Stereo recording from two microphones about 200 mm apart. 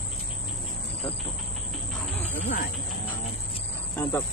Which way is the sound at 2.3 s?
40° left (ahead or behind).